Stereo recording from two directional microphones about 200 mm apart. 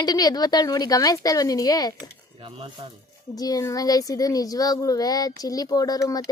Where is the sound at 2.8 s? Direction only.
25° right (ahead or behind).